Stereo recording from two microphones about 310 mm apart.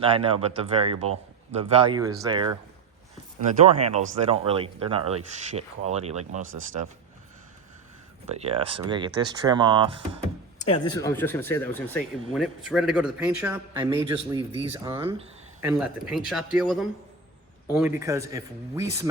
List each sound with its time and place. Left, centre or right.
0.0 s speech: centre
8.3 s speech: centre
10.6 s speech: centre